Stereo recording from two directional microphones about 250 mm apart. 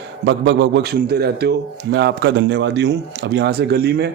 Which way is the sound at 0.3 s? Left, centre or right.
Right.